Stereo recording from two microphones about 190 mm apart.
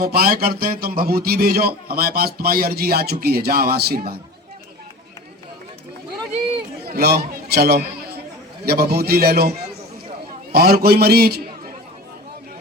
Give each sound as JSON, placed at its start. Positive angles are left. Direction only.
{"t": 0.0, "sound": "a man's voice", "side_deg": -55}
{"t": 6.8, "sound": "a man's voice", "side_deg": -55}
{"t": 10.5, "sound": "a man's voice", "side_deg": -55}